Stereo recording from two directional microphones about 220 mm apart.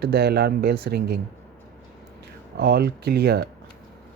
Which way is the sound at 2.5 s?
45° right (ahead or behind).